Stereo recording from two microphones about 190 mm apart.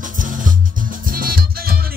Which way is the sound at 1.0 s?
50° right (ahead or behind).